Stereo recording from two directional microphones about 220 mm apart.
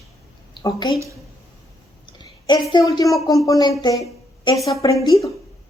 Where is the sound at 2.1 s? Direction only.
20° left (ahead or behind).